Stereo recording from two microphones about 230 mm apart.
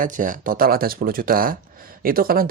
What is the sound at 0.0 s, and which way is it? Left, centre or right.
Speech, right.